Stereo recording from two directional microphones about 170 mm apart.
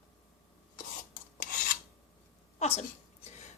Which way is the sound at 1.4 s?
50° left (ahead or behind).